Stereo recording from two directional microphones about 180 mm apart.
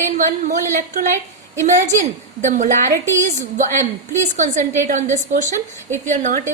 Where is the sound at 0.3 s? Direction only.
45° right (ahead or behind).